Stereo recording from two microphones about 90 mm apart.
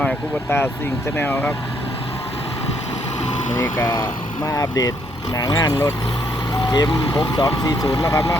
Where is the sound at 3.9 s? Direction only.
40° left (ahead or behind).